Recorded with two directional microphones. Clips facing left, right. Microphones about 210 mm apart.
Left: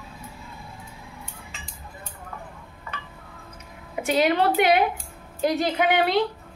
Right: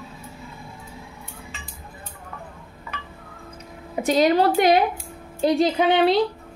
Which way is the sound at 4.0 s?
35° right (ahead or behind).